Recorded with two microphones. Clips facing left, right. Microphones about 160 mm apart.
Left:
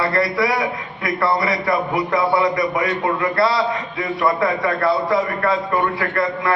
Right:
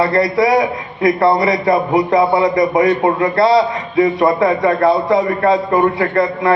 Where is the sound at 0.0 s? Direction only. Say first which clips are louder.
Right 6 dB; 25° right (ahead or behind).